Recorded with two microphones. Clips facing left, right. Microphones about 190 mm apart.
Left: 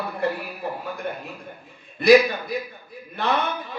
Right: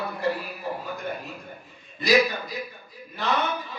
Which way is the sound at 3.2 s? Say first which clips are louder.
Left 2 dB; 55° left (ahead or behind).